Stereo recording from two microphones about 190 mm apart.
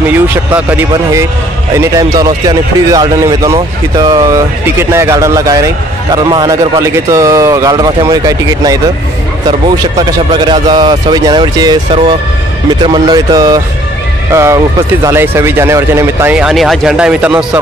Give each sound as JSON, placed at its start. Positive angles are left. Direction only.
{"t": 0.0, "sound": "a man's voice", "side_deg": -10}